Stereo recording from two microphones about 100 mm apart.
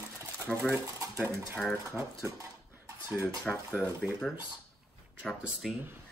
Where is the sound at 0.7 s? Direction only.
20° right (ahead or behind).